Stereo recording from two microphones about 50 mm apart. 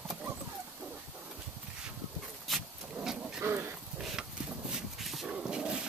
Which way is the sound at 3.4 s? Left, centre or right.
Right.